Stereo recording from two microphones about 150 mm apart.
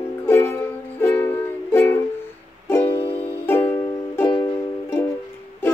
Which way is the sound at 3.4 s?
15° left (ahead or behind).